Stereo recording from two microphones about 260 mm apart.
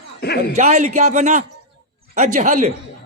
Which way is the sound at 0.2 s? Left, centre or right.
Left.